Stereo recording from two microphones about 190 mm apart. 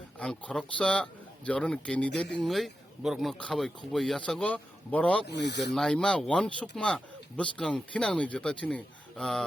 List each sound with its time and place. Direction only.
0.2 s speech: 5° left (ahead or behind)
5.2 s speech: 65° left (ahead or behind)
5.7 s speech: 5° left (ahead or behind)